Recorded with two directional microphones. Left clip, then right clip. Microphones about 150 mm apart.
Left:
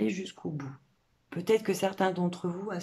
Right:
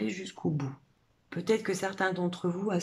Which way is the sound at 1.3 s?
10° left (ahead or behind).